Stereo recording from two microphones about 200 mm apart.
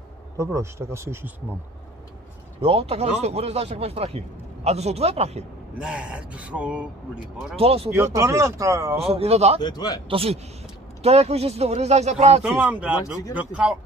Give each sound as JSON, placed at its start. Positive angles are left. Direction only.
{"t": 0.4, "sound": "speech", "side_deg": -15}
{"t": 2.6, "sound": "speech", "side_deg": -30}
{"t": 5.8, "sound": "speech", "side_deg": -5}
{"t": 7.5, "sound": "a man's voice", "side_deg": -30}
{"t": 7.9, "sound": "speech", "side_deg": -15}
{"t": 8.9, "sound": "speech", "side_deg": -30}
{"t": 9.6, "sound": "speech", "side_deg": 20}
{"t": 10.0, "sound": "a man's voice", "side_deg": -30}
{"t": 12.4, "sound": "speech", "side_deg": -10}